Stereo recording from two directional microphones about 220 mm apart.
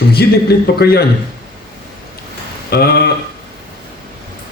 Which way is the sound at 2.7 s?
45° left (ahead or behind).